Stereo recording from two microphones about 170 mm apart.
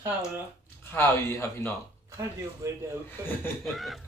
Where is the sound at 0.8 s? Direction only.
15° left (ahead or behind).